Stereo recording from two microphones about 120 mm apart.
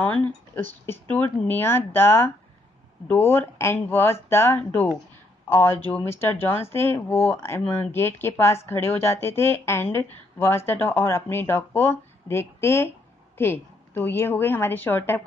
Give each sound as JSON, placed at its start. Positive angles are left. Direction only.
{"t": 0.0, "sound": "a woman's voice", "side_deg": 15}